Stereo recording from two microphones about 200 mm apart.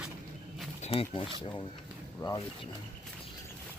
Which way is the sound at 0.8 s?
30° left (ahead or behind).